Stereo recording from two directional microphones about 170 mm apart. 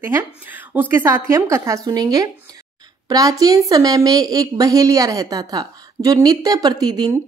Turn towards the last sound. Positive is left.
turn(degrees=-25)  # may be behind; listen again after turning